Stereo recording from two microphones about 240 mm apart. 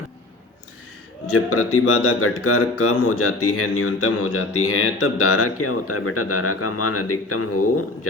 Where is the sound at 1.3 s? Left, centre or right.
Left.